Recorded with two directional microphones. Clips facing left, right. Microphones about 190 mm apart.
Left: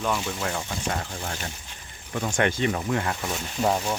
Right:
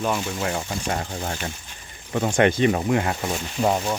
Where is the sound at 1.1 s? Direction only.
35° right (ahead or behind).